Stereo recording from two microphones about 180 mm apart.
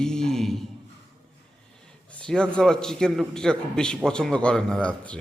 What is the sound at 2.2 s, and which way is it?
A man's voice, 5° left (ahead or behind).